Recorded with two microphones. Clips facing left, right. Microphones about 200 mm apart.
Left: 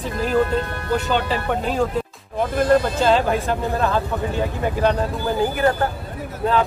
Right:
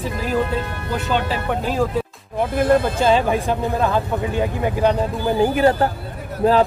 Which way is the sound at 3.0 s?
10° right (ahead or behind).